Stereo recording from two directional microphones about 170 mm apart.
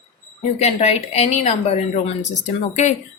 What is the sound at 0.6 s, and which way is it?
Speech, 40° left (ahead or behind).